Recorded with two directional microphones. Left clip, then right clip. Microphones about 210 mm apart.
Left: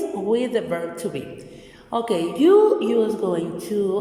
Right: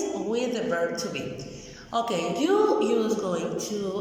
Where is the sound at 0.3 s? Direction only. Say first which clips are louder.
Left 7 dB; 35° left (ahead or behind).